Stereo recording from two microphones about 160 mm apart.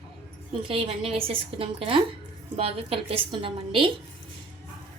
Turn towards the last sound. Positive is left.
turn(degrees=-35)  # may be behind; listen again after turning